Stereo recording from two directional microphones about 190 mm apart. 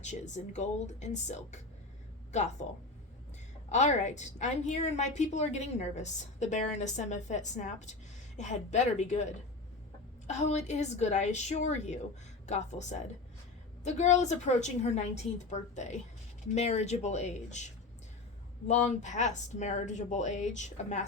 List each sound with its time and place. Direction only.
0.0 s a woman's voice: 40° left (ahead or behind)
3.7 s a woman's voice: 40° left (ahead or behind)
18.7 s a woman's voice: 40° left (ahead or behind)